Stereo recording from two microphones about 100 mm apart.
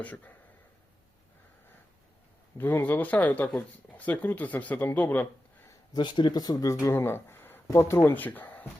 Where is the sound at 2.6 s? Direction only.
20° left (ahead or behind).